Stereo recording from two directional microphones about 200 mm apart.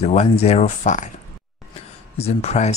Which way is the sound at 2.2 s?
30° left (ahead or behind).